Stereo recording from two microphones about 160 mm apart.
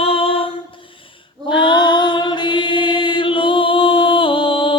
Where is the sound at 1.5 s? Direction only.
30° left (ahead or behind).